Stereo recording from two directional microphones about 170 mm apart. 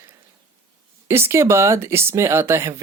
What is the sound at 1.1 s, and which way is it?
Speech, 15° right (ahead or behind).